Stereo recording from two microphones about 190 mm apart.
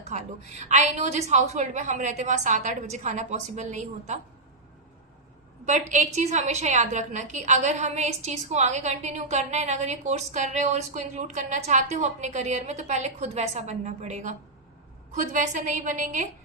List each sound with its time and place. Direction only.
0.1 s a woman's voice: 40° right (ahead or behind)
5.6 s a woman's voice: 40° right (ahead or behind)